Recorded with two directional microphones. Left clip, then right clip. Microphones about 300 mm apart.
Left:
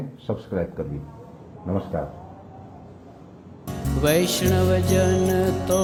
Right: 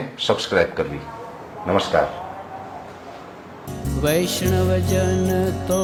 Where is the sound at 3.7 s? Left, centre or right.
Centre.